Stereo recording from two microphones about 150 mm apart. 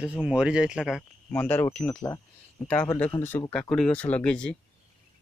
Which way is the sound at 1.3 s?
10° left (ahead or behind).